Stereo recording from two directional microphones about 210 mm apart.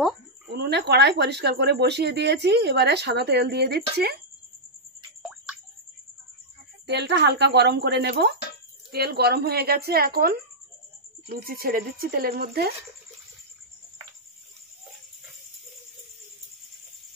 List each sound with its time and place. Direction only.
0.5 s speech: 50° right (ahead or behind)
6.9 s speech: 55° right (ahead or behind)